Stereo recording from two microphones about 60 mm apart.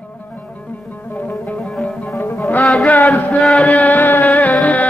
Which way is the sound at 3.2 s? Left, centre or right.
Left.